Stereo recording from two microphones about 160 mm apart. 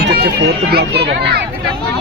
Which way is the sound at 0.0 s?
90° right.